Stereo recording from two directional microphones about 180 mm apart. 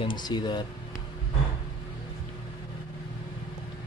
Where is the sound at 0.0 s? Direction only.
25° left (ahead or behind).